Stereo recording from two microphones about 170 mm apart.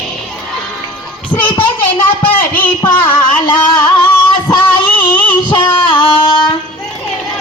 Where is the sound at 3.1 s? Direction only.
25° left (ahead or behind).